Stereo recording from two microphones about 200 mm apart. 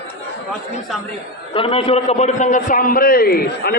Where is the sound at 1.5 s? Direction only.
25° left (ahead or behind).